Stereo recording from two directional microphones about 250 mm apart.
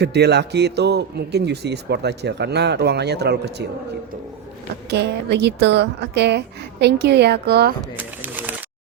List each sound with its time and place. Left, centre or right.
0.0 s a man's voice: right
4.9 s a woman's voice: right
7.9 s a sound: centre